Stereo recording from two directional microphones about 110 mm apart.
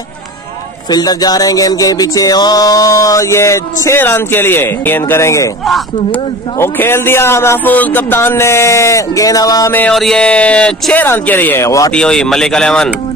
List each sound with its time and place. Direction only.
0.8 s music: 35° left (ahead or behind)
6.6 s music: 20° left (ahead or behind)
9.8 s speech: 5° left (ahead or behind); by 11.9 s 30° left (ahead or behind)
11.9 s speech: 10° left (ahead or behind)